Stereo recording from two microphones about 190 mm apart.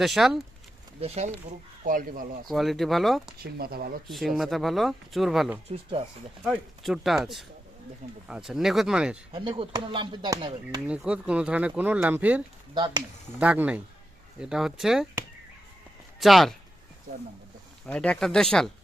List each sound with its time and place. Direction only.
0.0 s speech: centre (ahead or behind)
1.0 s speech: 35° right (ahead or behind)
1.5 s speech: 45° right (ahead or behind)
2.5 s speech: centre (ahead or behind)
3.4 s speech: 55° right (ahead or behind)
4.1 s speech: centre (ahead or behind)
9.6 s speech: 25° right (ahead or behind)
10.8 s speech: 5° right (ahead or behind)
12.7 s speech: 25° right (ahead or behind)
13.4 s speech: 5° right (ahead or behind)
16.2 s speech: centre (ahead or behind)
17.8 s speech: 5° left (ahead or behind)